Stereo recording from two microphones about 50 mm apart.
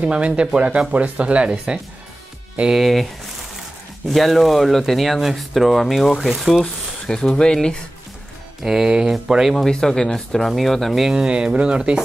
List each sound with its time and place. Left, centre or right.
0.0 s speech: right
2.7 s speech: centre
4.1 s speech: centre
6.6 s speech: centre
8.6 s speech: centre
9.7 s speech: centre
11.1 s speech: centre